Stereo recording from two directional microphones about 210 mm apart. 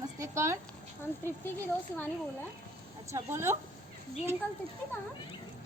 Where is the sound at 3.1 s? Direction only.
10° right (ahead or behind).